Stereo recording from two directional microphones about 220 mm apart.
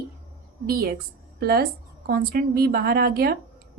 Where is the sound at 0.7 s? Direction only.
40° right (ahead or behind).